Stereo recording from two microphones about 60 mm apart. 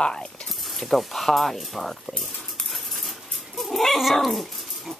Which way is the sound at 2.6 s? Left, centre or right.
Centre.